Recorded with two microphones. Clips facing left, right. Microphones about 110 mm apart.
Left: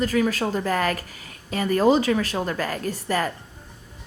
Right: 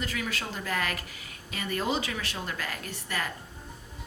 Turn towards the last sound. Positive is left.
turn(degrees=40)  # may be behind; listen again after turning